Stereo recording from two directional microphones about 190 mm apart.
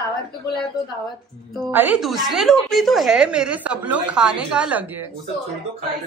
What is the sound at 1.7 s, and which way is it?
A woman's voice, 10° right (ahead or behind).